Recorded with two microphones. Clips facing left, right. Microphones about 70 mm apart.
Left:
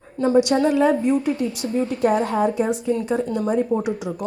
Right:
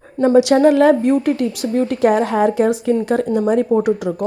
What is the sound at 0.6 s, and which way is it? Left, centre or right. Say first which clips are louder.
A woman's voice: right 6 dB; right.